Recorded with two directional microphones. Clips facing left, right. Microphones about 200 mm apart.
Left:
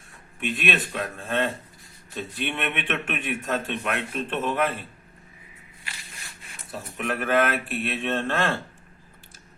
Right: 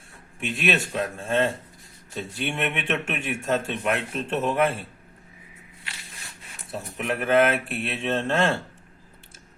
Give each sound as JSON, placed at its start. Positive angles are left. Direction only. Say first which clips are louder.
{"t": 0.5, "sound": "speech", "louder": "right 3 dB", "side_deg": -25}
{"t": 6.7, "sound": "speech", "louder": "right 1 dB", "side_deg": -25}